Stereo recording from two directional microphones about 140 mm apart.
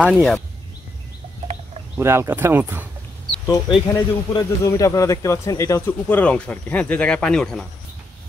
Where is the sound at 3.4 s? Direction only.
25° left (ahead or behind); by 7.6 s 5° left (ahead or behind).